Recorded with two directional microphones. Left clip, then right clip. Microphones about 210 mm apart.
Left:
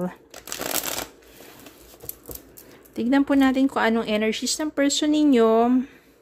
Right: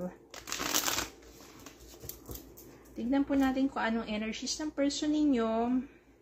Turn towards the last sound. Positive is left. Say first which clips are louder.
# left 12 dB
turn(degrees=55)  # may be behind; listen again after turning